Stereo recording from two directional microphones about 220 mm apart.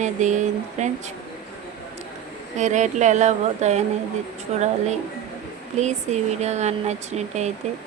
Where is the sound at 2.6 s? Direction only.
35° right (ahead or behind).